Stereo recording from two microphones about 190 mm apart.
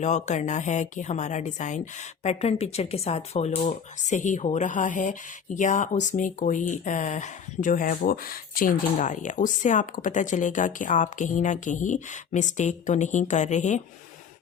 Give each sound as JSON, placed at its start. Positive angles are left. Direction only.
{"t": 0.0, "sound": "speech", "side_deg": 40}